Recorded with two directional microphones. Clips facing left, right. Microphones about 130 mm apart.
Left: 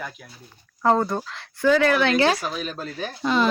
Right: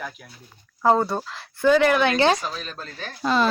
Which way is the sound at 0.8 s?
10° right (ahead or behind).